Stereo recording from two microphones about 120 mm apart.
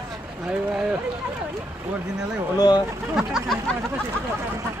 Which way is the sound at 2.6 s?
35° left (ahead or behind).